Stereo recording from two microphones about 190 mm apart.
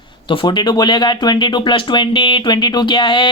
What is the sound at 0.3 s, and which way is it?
Speech, 25° left (ahead or behind).